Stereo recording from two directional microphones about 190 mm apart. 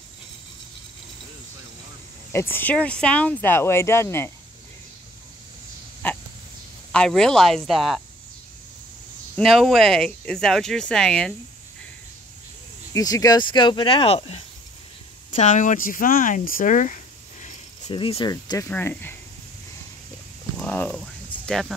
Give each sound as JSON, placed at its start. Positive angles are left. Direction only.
{"t": 2.3, "sound": "speech", "side_deg": 10}
{"t": 6.0, "sound": "a sound", "side_deg": 10}
{"t": 6.9, "sound": "speech", "side_deg": 5}
{"t": 9.4, "sound": "speech", "side_deg": 0}
{"t": 12.9, "sound": "speech", "side_deg": 20}
{"t": 17.8, "sound": "speech", "side_deg": 25}
{"t": 18.3, "sound": "speech", "side_deg": 15}
{"t": 20.5, "sound": "a sound", "side_deg": 10}